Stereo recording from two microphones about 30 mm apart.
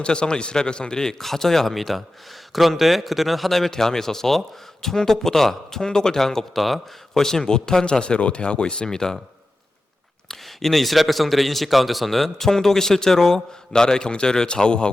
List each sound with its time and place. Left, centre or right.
0.0 s speech: left
1.2 s a man's voice: centre
3.7 s a man's voice: centre
5.8 s a man's voice: left
6.6 s a man's voice: centre
7.2 s a man's voice: centre
7.4 s speech: left
8.9 s speech: centre
10.2 s a man's voice: centre; by 14.8 s left